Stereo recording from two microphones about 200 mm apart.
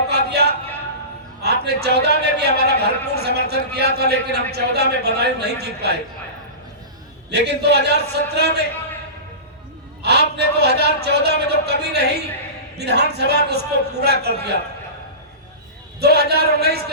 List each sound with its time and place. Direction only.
0.1 s a sound: 55° right (ahead or behind)
3.1 s a man's voice: 55° right (ahead or behind)
7.3 s a man's voice: 55° right (ahead or behind)
10.0 s a man's voice: 55° right (ahead or behind)
16.0 s a man's voice: 55° right (ahead or behind)